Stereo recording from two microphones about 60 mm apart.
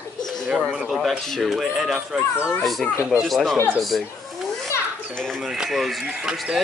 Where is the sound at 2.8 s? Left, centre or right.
Centre.